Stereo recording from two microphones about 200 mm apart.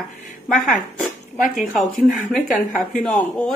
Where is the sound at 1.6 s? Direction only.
Centre (ahead or behind).